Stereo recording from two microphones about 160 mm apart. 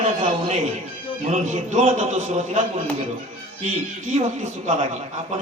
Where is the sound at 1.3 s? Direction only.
45° right (ahead or behind).